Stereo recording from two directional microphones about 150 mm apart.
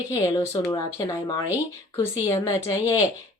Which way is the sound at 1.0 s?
20° left (ahead or behind).